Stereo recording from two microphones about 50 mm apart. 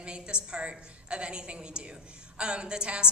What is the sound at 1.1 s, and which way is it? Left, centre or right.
A woman's voice, centre.